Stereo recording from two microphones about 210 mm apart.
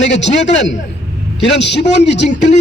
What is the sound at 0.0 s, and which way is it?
A man's voice, 55° left (ahead or behind).